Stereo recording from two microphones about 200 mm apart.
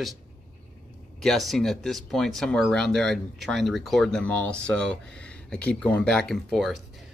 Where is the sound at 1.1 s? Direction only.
Centre (ahead or behind).